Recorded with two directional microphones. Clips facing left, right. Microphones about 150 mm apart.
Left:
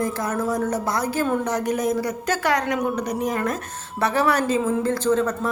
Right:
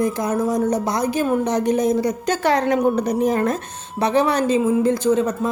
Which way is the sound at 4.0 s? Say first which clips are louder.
Right 3 dB; 20° right (ahead or behind).